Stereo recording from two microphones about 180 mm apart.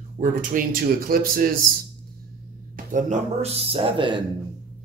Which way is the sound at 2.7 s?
45° right (ahead or behind).